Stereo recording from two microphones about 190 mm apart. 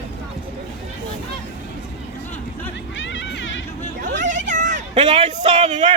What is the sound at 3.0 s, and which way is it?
Music, 75° left (ahead or behind).